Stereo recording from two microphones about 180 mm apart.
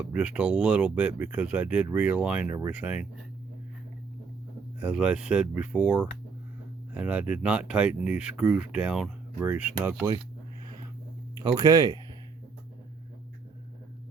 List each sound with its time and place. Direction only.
0.0 s speech: 5° right (ahead or behind)
4.8 s speech: 5° right (ahead or behind)
11.4 s speech: 20° right (ahead or behind)